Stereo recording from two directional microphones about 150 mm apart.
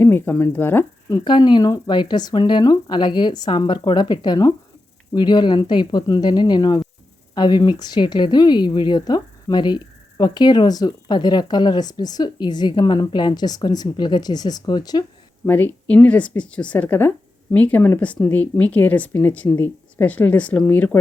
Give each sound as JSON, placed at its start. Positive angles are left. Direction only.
{"t": 0.0, "sound": "speech", "side_deg": 15}
{"t": 1.2, "sound": "a woman's voice", "side_deg": 30}
{"t": 15.4, "sound": "speech", "side_deg": 10}